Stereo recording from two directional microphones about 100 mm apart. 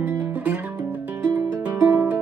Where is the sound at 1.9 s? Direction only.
20° right (ahead or behind).